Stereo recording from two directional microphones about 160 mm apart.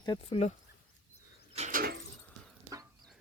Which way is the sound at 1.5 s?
50° right (ahead or behind).